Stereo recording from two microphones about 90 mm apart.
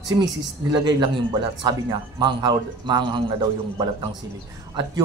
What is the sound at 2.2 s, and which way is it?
A man's voice, 55° right (ahead or behind).